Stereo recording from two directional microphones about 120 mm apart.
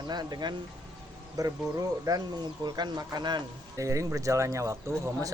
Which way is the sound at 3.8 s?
25° right (ahead or behind).